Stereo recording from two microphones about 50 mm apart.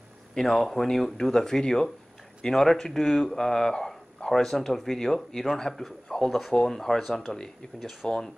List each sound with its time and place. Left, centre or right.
0.3 s a man's voice: centre